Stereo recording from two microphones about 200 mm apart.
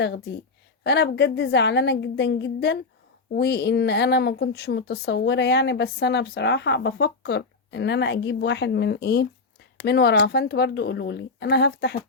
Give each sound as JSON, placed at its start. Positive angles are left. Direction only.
{"t": 0.0, "sound": "a woman's voice", "side_deg": 60}